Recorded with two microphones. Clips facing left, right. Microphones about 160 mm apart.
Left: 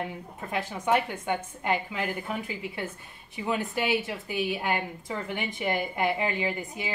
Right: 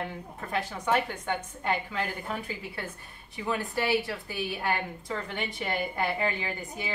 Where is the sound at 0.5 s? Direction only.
15° left (ahead or behind).